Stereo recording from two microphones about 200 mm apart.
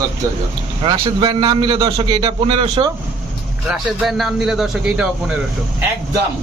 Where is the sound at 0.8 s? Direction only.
25° right (ahead or behind).